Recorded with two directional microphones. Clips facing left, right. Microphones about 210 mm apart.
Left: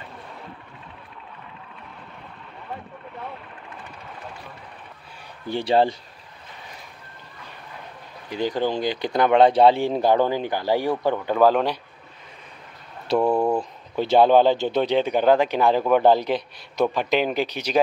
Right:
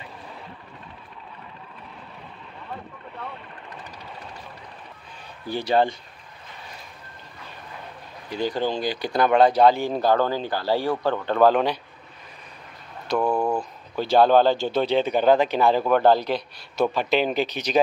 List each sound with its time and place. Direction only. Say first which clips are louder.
5.5 s speech: left 2 dB; 30° left (ahead or behind)
8.3 s speech: left 1 dB; 15° left (ahead or behind)
9.9 s speech: left 2 dB; 15° left (ahead or behind)
13.3 s speech: left 2 dB; 15° left (ahead or behind)